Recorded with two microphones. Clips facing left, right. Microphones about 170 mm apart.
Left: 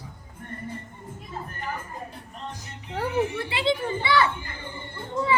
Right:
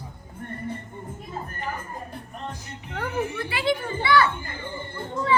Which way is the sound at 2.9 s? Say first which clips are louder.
Left 3 dB; 30° left (ahead or behind).